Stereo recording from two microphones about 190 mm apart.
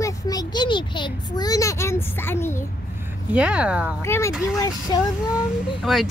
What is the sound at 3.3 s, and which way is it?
Speech, 5° right (ahead or behind).